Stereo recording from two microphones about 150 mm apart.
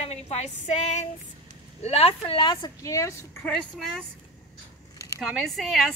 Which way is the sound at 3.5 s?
5° left (ahead or behind).